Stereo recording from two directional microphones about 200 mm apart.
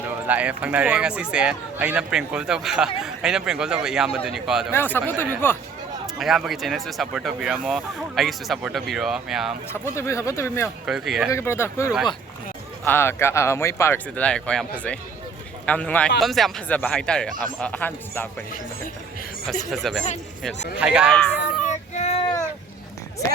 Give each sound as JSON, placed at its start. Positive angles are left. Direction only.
{"t": 0.3, "sound": "speech", "side_deg": -5}
{"t": 4.7, "sound": "speech", "side_deg": 10}
{"t": 6.1, "sound": "speech", "side_deg": 0}
{"t": 9.8, "sound": "speech", "side_deg": 15}
{"t": 10.8, "sound": "speech", "side_deg": 0}
{"t": 11.3, "sound": "speech", "side_deg": 15}
{"t": 19.7, "sound": "speech", "side_deg": 0}
{"t": 21.9, "sound": "a sound", "side_deg": 35}